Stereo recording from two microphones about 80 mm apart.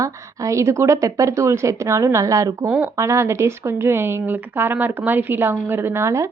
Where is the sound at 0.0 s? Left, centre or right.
Right.